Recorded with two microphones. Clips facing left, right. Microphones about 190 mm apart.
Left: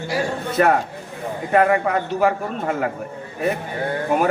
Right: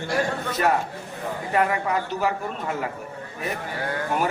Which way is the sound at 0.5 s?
55° left (ahead or behind).